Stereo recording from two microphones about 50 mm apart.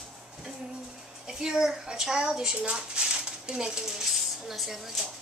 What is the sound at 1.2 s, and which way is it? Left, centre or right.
Speech, centre.